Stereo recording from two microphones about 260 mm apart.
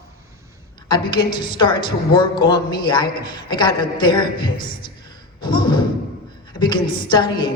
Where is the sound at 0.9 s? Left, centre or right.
Centre.